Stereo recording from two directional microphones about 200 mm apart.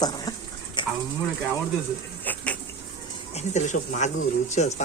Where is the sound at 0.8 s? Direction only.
25° left (ahead or behind).